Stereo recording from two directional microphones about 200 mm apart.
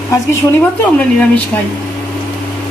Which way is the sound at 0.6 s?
5° left (ahead or behind).